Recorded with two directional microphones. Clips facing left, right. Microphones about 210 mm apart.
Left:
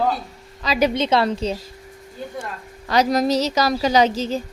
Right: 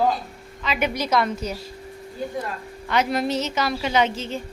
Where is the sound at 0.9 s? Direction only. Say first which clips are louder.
Left 4 dB; 25° left (ahead or behind).